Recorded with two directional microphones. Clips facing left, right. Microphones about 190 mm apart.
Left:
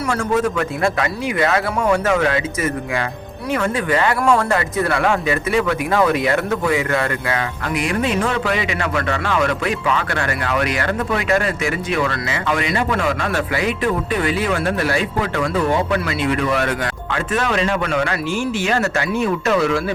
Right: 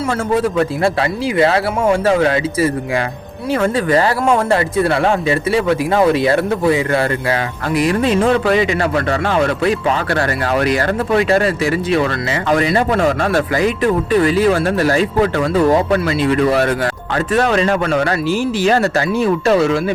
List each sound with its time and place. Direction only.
0.3 s speech: 30° right (ahead or behind)